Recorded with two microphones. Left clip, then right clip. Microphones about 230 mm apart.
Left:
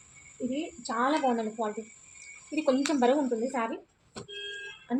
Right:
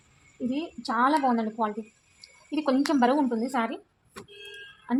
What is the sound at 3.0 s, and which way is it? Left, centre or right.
Speech, right.